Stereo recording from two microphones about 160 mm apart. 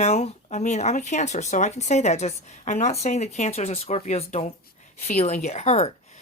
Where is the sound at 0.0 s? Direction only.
45° left (ahead or behind).